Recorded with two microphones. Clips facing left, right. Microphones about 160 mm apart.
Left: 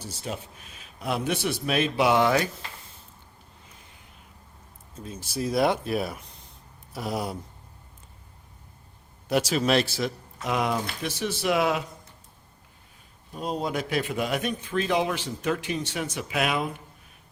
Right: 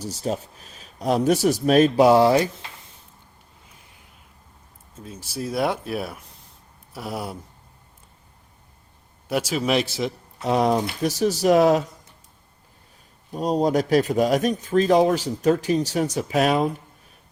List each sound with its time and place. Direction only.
0.0 s a man's voice: 40° right (ahead or behind)
5.0 s speech: 5° right (ahead or behind)
9.3 s speech: 5° right (ahead or behind)
10.4 s a man's voice: 35° right (ahead or behind)
13.3 s a man's voice: 40° right (ahead or behind)